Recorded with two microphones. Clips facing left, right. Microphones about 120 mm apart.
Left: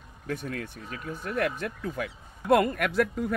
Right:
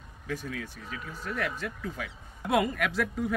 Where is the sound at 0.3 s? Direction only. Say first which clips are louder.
Left 2 dB; 55° left (ahead or behind).